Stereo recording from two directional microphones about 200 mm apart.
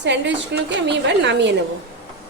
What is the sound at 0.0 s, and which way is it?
A woman's voice, 60° right (ahead or behind).